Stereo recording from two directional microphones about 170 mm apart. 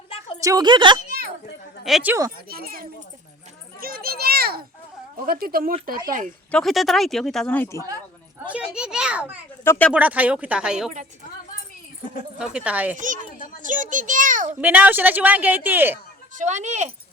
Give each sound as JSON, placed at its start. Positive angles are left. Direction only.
{"t": 0.3, "sound": "a woman's voice", "side_deg": -20}
{"t": 1.8, "sound": "speech", "side_deg": -5}
{"t": 2.5, "sound": "speech", "side_deg": -60}
{"t": 3.8, "sound": "children playing", "side_deg": -60}
{"t": 5.2, "sound": "speech", "side_deg": -60}
{"t": 6.5, "sound": "speech", "side_deg": 0}
{"t": 8.4, "sound": "children playing", "side_deg": -5}
{"t": 9.6, "sound": "speech", "side_deg": 10}
{"t": 9.9, "sound": "a man's voice", "side_deg": -10}
{"t": 12.4, "sound": "a man's voice", "side_deg": -5}
{"t": 13.6, "sound": "a child's voice", "side_deg": -50}
{"t": 14.6, "sound": "a man's voice", "side_deg": -10}
{"t": 16.3, "sound": "speech", "side_deg": -45}